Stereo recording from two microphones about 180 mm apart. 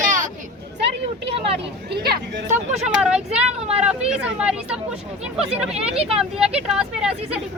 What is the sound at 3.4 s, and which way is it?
Speech, 35° right (ahead or behind).